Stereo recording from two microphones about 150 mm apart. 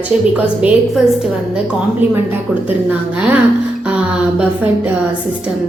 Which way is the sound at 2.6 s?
10° right (ahead or behind).